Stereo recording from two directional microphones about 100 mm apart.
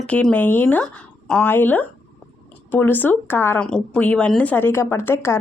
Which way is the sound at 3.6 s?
10° left (ahead or behind).